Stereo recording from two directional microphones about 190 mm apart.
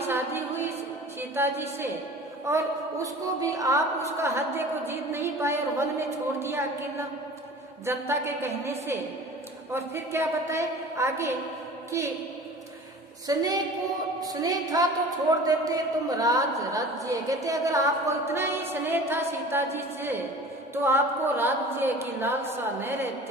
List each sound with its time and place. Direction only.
0.1 s a sound: 10° right (ahead or behind)
1.3 s a woman's voice: 10° right (ahead or behind)
13.3 s a woman's voice: 20° right (ahead or behind)